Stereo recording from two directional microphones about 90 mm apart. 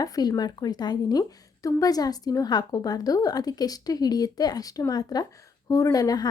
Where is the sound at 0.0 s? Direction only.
45° left (ahead or behind).